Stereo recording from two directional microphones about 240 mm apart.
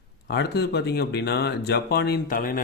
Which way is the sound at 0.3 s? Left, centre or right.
Left.